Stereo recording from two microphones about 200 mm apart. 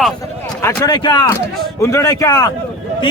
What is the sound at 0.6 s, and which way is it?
A man's voice, 20° left (ahead or behind).